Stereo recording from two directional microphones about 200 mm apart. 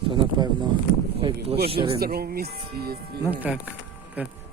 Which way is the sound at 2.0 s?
50° right (ahead or behind).